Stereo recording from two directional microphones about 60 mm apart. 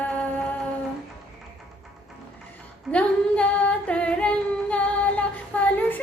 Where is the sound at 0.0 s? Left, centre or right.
Left.